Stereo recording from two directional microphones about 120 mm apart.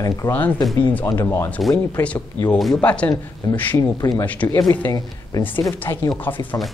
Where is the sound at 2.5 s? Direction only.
Centre (ahead or behind); by 4.2 s 25° left (ahead or behind).